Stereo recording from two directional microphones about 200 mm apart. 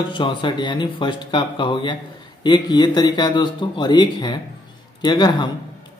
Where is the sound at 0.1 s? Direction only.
25° left (ahead or behind).